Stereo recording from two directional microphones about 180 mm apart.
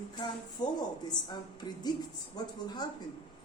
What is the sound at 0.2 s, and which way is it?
A woman's voice, 25° left (ahead or behind).